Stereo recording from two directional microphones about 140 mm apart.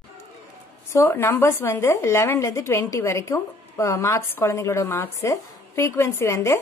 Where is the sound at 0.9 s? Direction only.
15° left (ahead or behind).